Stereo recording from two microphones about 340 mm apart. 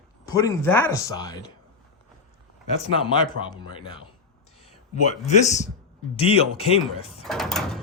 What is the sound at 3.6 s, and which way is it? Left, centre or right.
Speech, centre.